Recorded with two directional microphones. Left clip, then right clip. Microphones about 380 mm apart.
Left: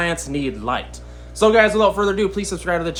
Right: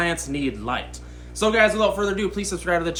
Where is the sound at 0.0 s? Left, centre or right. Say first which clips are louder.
Left 2 dB; centre.